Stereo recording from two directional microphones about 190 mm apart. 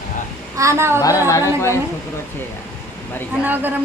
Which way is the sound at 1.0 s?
15° left (ahead or behind).